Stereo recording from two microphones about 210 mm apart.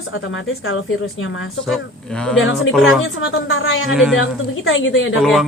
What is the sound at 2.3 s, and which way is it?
Speech, 70° left (ahead or behind).